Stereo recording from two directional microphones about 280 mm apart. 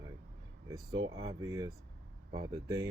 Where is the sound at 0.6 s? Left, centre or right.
Centre.